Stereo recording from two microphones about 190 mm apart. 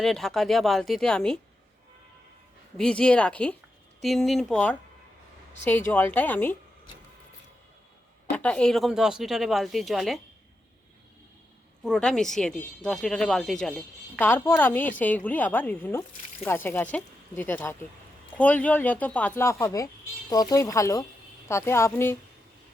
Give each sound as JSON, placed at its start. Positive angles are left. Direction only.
{"t": 0.0, "sound": "speech", "side_deg": 0}
{"t": 2.7, "sound": "speech", "side_deg": 5}
{"t": 8.4, "sound": "speech", "side_deg": 5}
{"t": 11.8, "sound": "speech", "side_deg": 5}